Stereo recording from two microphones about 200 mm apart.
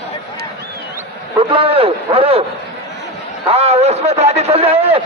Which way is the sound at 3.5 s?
30° right (ahead or behind).